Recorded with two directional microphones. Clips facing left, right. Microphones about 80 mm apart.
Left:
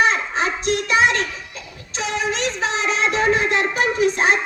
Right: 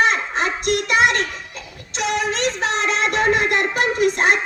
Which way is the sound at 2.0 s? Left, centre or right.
Right.